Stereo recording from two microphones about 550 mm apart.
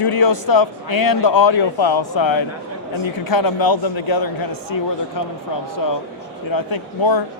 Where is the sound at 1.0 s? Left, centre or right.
Left.